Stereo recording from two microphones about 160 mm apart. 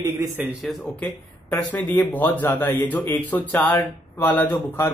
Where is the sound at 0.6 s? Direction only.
Centre (ahead or behind).